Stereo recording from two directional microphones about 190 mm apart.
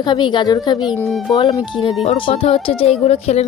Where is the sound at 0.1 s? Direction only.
25° left (ahead or behind).